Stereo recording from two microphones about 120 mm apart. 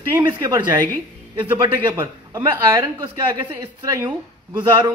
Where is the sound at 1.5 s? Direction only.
20° right (ahead or behind).